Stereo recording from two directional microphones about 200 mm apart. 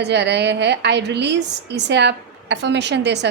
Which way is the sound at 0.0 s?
60° right (ahead or behind).